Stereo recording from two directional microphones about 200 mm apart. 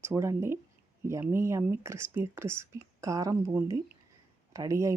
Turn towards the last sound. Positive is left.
turn(degrees=-15)  # may be behind; listen again after turning